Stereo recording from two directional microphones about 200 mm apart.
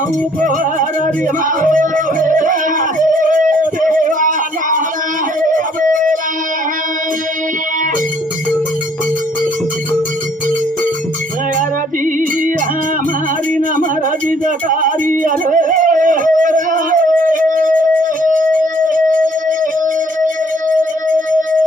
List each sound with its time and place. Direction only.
0.4 s music: 40° right (ahead or behind)
14.3 s music: 40° right (ahead or behind)